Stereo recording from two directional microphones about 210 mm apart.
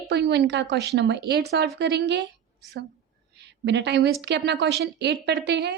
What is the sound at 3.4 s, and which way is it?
A woman's voice, 55° right (ahead or behind).